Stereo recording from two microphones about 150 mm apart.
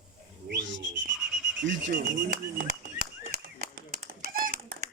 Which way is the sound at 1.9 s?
65° right (ahead or behind).